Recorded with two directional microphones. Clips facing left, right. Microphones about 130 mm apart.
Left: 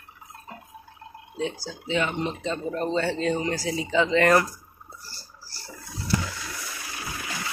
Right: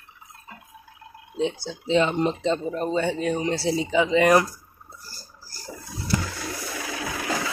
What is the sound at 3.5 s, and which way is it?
Speech, 30° right (ahead or behind).